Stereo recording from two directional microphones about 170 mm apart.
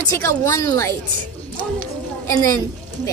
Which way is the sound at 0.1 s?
15° left (ahead or behind).